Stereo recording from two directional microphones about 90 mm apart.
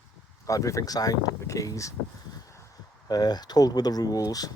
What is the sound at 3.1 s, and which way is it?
Speech, 50° left (ahead or behind).